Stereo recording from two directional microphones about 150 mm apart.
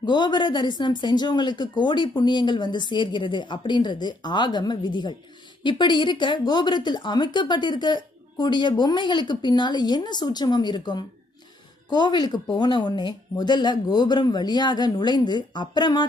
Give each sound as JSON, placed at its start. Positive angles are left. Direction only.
{"t": 0.0, "sound": "a woman's voice", "side_deg": 30}